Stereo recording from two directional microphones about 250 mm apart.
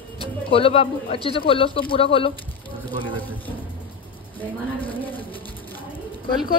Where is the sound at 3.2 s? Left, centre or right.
Centre.